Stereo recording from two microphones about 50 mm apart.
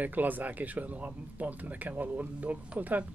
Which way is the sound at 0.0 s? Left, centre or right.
Right.